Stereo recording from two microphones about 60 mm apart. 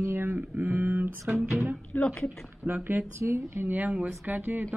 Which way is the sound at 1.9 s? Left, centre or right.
Left.